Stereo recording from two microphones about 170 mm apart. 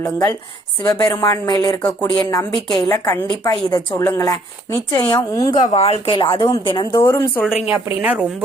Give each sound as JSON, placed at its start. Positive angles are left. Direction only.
{"t": 0.0, "sound": "a woman's voice", "side_deg": 20}
{"t": 5.5, "sound": "a woman's voice", "side_deg": 35}
{"t": 6.9, "sound": "speech", "side_deg": 15}
{"t": 7.7, "sound": "a woman's voice", "side_deg": -10}